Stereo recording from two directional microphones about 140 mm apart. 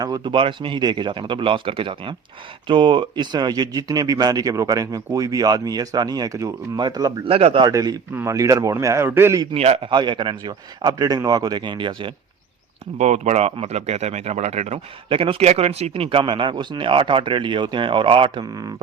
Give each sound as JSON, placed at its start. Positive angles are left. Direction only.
{"t": 0.0, "sound": "a man's voice", "side_deg": -30}
{"t": 7.3, "sound": "speech", "side_deg": -45}
{"t": 7.6, "sound": "speech", "side_deg": -25}
{"t": 9.6, "sound": "a man's voice", "side_deg": -45}
{"t": 13.0, "sound": "speech", "side_deg": -55}
{"t": 15.1, "sound": "a man's voice", "side_deg": -40}